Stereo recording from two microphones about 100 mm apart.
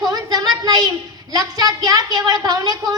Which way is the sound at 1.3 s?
40° right (ahead or behind).